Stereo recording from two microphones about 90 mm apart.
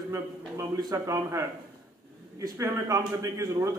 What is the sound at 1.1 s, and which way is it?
A man's voice, 30° right (ahead or behind).